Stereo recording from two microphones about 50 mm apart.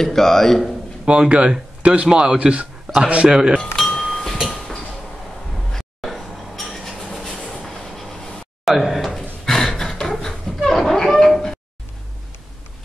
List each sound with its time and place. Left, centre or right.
0.0 s speech: centre
1.0 s a man's voice: right
2.9 s a sound: centre
3.3 s speech: centre
3.7 s wind chime: centre
5.9 s cutlery: centre
7.5 s train: centre
8.6 s a sound: centre
9.8 s a sound: centre